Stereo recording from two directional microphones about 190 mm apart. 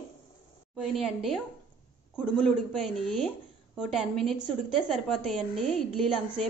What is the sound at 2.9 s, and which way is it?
A woman's voice, centre (ahead or behind).